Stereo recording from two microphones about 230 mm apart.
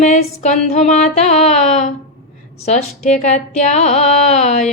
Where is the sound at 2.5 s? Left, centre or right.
Left.